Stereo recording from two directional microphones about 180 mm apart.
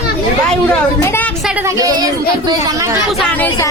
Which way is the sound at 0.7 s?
10° left (ahead or behind).